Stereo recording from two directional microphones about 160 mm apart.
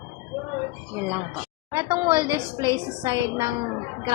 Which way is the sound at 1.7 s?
30° right (ahead or behind).